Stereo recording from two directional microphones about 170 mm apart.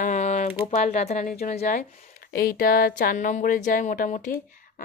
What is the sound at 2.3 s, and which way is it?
A woman's voice, 60° left (ahead or behind).